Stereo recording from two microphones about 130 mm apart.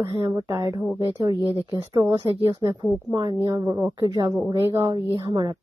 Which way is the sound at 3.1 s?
35° right (ahead or behind).